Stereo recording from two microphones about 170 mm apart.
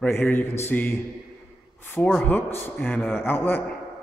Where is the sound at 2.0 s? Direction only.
5° left (ahead or behind).